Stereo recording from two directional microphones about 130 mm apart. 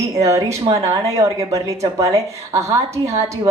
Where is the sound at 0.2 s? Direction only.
25° right (ahead or behind).